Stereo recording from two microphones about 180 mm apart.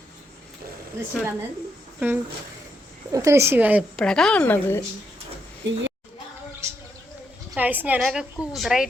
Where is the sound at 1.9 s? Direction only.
10° right (ahead or behind).